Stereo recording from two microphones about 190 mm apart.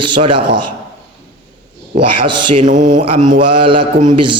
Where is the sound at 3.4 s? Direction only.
25° right (ahead or behind).